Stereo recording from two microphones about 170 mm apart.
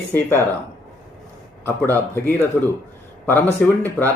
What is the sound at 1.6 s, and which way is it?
Speech, 10° left (ahead or behind).